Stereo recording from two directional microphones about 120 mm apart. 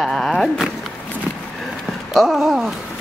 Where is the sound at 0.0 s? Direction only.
Centre (ahead or behind).